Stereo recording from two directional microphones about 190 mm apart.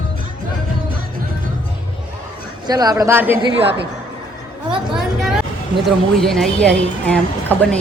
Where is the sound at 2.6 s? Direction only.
20° right (ahead or behind).